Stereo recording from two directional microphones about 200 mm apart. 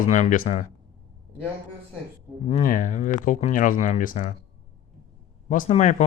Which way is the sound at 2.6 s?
40° left (ahead or behind).